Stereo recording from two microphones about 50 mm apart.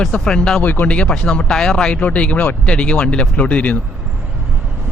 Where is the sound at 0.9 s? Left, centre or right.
Left.